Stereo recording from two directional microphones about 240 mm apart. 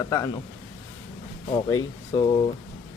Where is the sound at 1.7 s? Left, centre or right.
Centre.